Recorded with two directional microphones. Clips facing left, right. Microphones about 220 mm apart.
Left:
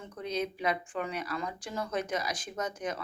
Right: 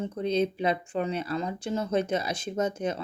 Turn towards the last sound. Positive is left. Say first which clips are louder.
# right 7 dB
turn(degrees=-25)  # may be behind; listen again after turning